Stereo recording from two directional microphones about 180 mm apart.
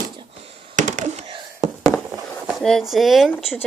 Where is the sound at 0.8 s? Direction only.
45° right (ahead or behind).